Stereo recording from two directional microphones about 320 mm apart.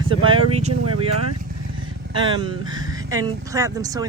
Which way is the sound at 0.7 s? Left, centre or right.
Right.